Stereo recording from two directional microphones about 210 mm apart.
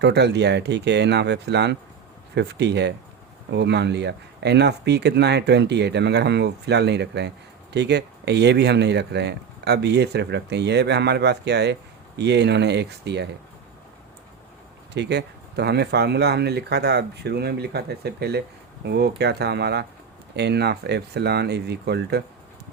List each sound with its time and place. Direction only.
0.0 s speech: 55° right (ahead or behind)
14.9 s speech: 55° right (ahead or behind)